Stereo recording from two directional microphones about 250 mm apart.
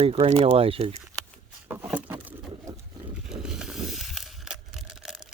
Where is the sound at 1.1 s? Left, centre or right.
Centre.